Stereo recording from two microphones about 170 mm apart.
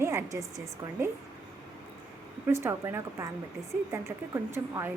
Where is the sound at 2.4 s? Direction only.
15° right (ahead or behind).